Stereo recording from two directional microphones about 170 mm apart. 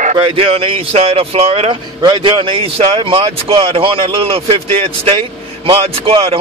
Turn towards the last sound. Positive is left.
turn(degrees=-30)  # may be behind; listen again after turning